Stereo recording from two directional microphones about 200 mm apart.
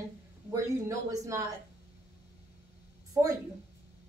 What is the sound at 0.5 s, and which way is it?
Speech, 15° right (ahead or behind).